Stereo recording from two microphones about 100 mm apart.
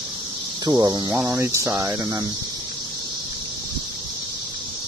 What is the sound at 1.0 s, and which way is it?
Speech, 20° right (ahead or behind).